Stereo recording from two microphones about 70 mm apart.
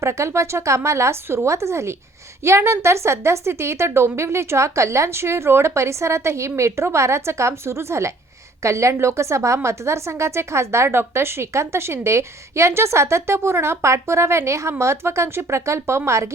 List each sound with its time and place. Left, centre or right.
0.0 s a woman's voice: right